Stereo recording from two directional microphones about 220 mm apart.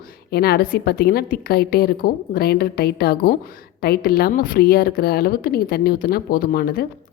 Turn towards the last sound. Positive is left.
turn(degrees=40)  # may be behind; listen again after turning